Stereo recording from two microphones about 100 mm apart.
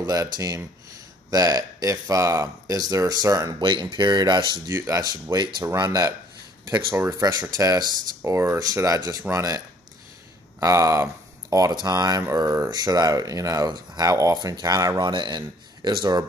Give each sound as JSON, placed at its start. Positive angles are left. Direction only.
{"t": 0.0, "sound": "speech", "side_deg": -40}
{"t": 4.6, "sound": "speech", "side_deg": -30}
{"t": 5.3, "sound": "speech", "side_deg": -45}
{"t": 6.9, "sound": "speech", "side_deg": -25}
{"t": 10.6, "sound": "speech", "side_deg": -30}